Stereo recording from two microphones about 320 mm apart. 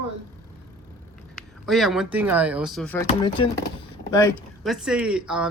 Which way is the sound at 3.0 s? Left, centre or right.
Centre.